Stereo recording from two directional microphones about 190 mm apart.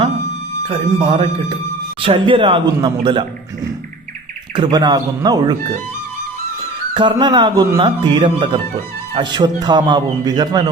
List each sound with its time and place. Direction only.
0.7 s speech: 25° right (ahead or behind)
4.5 s speech: 20° right (ahead or behind)
6.9 s speech: 25° right (ahead or behind)